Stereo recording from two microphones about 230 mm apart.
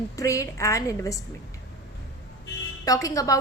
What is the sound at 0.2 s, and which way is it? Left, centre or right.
Speech, centre.